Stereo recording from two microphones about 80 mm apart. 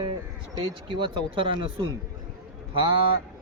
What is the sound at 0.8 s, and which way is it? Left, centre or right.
Speech, right.